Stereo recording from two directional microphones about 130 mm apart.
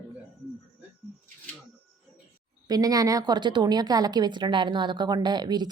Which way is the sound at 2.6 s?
30° right (ahead or behind).